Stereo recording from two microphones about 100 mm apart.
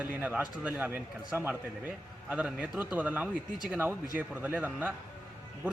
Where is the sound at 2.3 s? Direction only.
10° right (ahead or behind).